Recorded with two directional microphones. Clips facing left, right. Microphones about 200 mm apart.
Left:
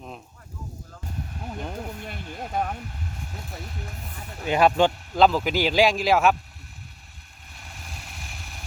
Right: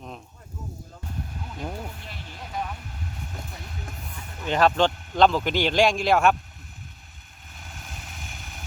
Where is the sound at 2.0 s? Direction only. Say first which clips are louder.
Left 6 dB; 50° left (ahead or behind).